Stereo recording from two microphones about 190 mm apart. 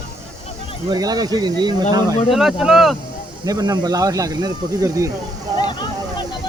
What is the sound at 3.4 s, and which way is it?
Speech, 20° right (ahead or behind).